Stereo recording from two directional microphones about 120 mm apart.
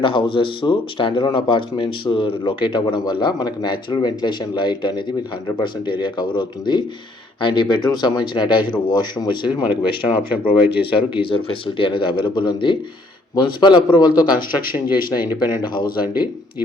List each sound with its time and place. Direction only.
0.0 s speech: 45° left (ahead or behind)
14.8 s speech: 15° right (ahead or behind)